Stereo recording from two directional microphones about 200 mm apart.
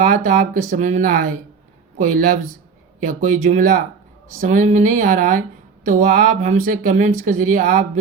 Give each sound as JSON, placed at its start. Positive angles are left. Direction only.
{"t": 0.0, "sound": "speech", "side_deg": -40}